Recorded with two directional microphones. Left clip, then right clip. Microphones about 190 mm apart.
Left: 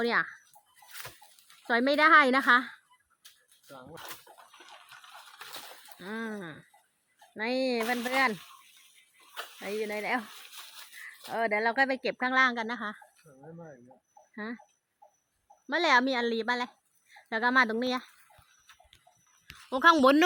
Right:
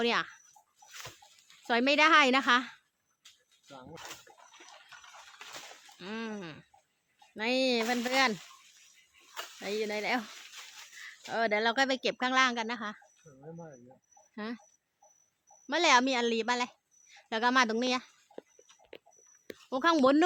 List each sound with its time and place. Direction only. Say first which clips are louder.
0.1 s speech: left 3 dB; 5° left (ahead or behind)
1.6 s a woman's voice: left 1 dB; 5° left (ahead or behind)
3.2 s a sound: left 1 dB; 55° left (ahead or behind)
6.0 s speech: left 2 dB; 5° left (ahead or behind)
9.6 s speech: even; 10° right (ahead or behind)
11.3 s a woman's voice: left 1 dB; 10° right (ahead or behind); by 13.4 s 25° left (ahead or behind)
14.3 s speech: left 1 dB; 5° right (ahead or behind)
15.6 s a woman's voice: even; centre (ahead or behind)
19.7 s speech: left 4 dB; 5° left (ahead or behind)